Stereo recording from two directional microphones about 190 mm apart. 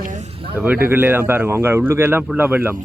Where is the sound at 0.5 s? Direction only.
10° right (ahead or behind).